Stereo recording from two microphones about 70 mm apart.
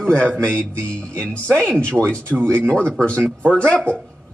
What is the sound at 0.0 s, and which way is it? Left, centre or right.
Speech, centre.